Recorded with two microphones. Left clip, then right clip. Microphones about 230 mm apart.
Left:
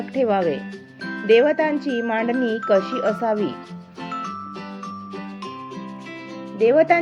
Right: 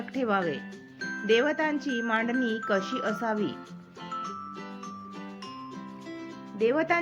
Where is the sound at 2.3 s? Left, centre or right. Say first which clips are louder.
Left 7 dB; left.